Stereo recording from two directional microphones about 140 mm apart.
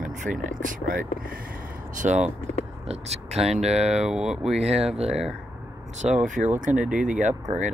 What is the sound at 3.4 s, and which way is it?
Speech, centre (ahead or behind).